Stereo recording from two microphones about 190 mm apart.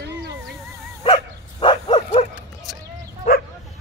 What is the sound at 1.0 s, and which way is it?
Dog, 30° left (ahead or behind).